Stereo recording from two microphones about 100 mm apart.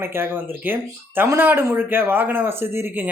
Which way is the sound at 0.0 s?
25° right (ahead or behind).